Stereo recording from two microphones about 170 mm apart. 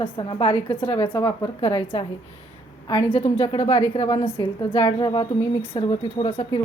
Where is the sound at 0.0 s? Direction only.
30° left (ahead or behind).